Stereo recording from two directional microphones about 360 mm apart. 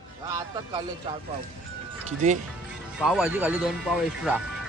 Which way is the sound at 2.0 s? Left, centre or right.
Centre.